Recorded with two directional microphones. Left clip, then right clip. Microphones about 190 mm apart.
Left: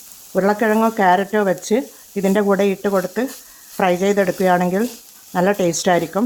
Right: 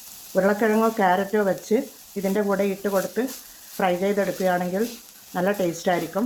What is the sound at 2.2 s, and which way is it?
Sizzle, 45° left (ahead or behind).